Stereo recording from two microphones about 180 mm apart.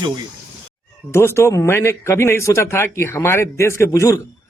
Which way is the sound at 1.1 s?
15° left (ahead or behind).